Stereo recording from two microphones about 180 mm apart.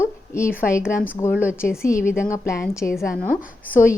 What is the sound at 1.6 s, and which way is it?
Speech, 55° left (ahead or behind).